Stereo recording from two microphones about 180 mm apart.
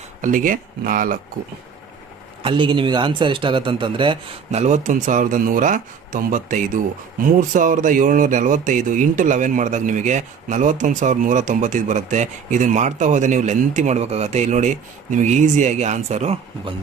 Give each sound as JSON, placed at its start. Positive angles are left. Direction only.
{"t": 0.2, "sound": "speech", "side_deg": -50}
{"t": 2.4, "sound": "a man's voice", "side_deg": -25}
{"t": 4.6, "sound": "speech", "side_deg": -45}